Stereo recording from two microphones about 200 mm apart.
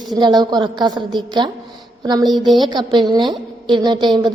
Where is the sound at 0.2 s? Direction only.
20° right (ahead or behind).